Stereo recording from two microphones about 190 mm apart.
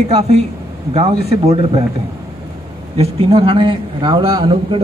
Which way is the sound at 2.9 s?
30° right (ahead or behind).